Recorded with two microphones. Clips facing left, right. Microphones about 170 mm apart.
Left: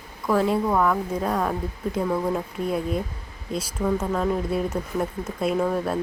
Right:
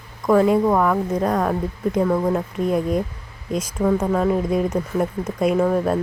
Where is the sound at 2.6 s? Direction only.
45° right (ahead or behind).